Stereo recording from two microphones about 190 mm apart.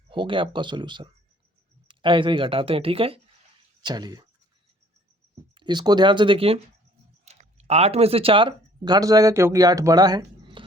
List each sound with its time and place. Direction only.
0.1 s speech: 25° right (ahead or behind)
5.5 s speech: 25° right (ahead or behind)